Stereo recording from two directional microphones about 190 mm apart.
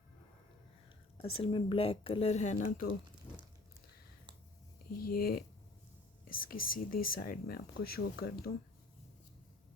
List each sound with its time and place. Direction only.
1.2 s speech: 30° left (ahead or behind); by 2.9 s 45° left (ahead or behind)
5.0 s speech: 50° left (ahead or behind)